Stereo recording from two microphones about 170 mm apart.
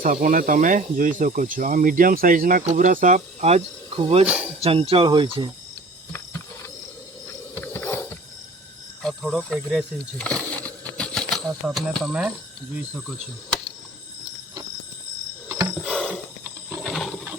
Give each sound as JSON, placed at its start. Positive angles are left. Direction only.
{"t": 0.0, "sound": "speech", "side_deg": -55}
{"t": 4.3, "sound": "speech", "side_deg": -10}
{"t": 4.6, "sound": "speech", "side_deg": -35}
{"t": 7.5, "sound": "wild animals", "side_deg": 10}
{"t": 9.0, "sound": "speech", "side_deg": 5}
{"t": 15.4, "sound": "wild animals", "side_deg": -20}
{"t": 15.8, "sound": "a sound", "side_deg": -5}
{"t": 16.8, "sound": "wild animals", "side_deg": 0}